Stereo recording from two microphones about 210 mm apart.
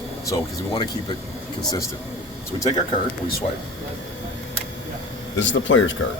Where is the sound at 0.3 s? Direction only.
20° left (ahead or behind).